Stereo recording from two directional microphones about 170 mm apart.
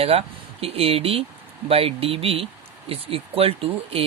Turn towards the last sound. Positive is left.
turn(degrees=-35)  # may be behind; listen again after turning